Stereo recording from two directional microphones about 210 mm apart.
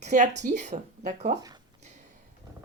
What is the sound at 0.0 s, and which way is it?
Speech, 35° right (ahead or behind).